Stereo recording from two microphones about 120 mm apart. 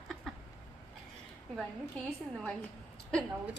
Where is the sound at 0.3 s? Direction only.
Centre (ahead or behind).